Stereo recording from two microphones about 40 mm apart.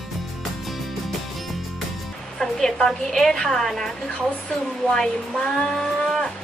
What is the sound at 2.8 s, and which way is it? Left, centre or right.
A woman's voice, centre.